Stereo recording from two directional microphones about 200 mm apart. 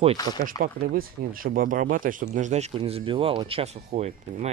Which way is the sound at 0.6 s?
50° right (ahead or behind).